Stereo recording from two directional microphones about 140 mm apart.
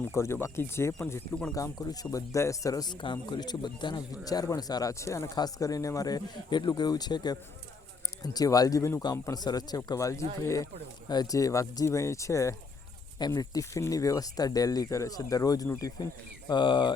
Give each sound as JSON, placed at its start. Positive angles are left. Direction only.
{"t": 0.1, "sound": "speech", "side_deg": 20}
{"t": 1.5, "sound": "speech", "side_deg": 25}
{"t": 16.5, "sound": "speech", "side_deg": 35}